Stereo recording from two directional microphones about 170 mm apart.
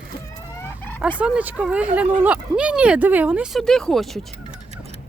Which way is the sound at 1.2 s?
5° right (ahead or behind).